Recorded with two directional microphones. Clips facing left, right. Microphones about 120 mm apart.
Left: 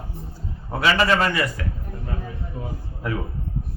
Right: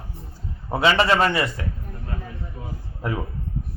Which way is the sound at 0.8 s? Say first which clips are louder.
Right 1 dB; 25° right (ahead or behind).